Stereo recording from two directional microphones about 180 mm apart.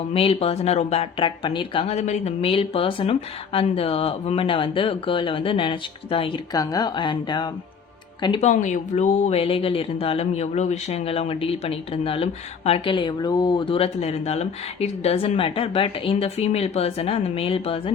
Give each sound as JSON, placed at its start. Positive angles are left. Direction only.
{"t": 0.1, "sound": "speech", "side_deg": 30}
{"t": 8.4, "sound": "speech", "side_deg": 45}